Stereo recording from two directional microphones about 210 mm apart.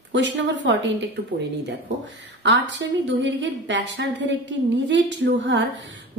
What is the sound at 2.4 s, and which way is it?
Speech, 60° right (ahead or behind).